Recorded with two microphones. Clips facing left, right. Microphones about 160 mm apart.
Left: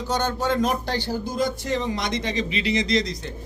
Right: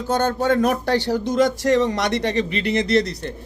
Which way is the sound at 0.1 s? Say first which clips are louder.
Right 5 dB; 55° right (ahead or behind).